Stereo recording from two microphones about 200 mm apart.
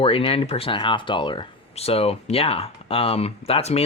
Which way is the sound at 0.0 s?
25° left (ahead or behind).